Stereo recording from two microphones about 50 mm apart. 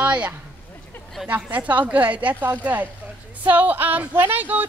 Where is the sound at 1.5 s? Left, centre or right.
Right.